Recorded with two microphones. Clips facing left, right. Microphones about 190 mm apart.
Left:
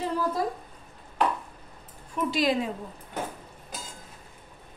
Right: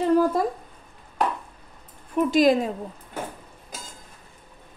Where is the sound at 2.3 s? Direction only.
45° right (ahead or behind).